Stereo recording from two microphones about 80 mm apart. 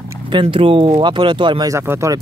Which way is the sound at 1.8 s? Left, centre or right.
Right.